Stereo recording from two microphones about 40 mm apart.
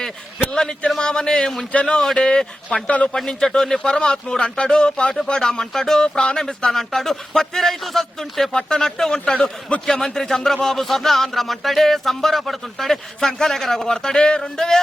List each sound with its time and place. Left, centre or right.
0.5 s speech: centre
2.8 s a man's voice: left
3.2 s speech: centre
9.8 s speech: centre